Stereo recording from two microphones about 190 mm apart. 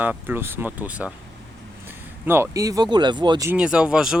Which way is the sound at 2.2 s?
10° right (ahead or behind).